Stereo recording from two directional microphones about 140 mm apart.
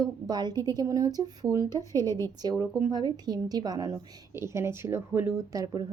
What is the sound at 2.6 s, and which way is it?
A woman's voice, 30° right (ahead or behind).